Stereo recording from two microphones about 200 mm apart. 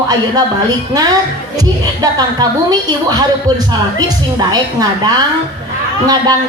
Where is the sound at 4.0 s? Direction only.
20° right (ahead or behind).